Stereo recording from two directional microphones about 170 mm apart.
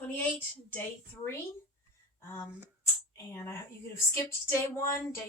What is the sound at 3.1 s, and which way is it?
Speech, 15° left (ahead or behind).